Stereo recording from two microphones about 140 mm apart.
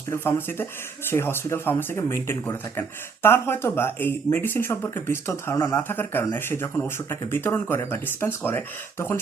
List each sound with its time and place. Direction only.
0.1 s speech: 15° left (ahead or behind)